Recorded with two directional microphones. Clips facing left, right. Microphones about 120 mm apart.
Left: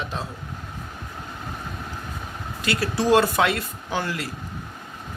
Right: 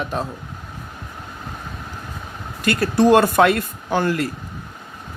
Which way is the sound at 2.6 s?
50° right (ahead or behind).